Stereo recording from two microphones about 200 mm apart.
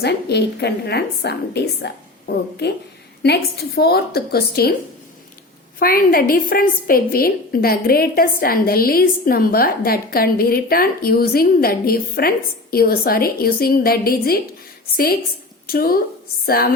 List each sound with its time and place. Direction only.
0.0 s a woman's voice: 55° left (ahead or behind)
5.8 s a woman's voice: 45° left (ahead or behind)
15.6 s a woman's voice: 50° left (ahead or behind)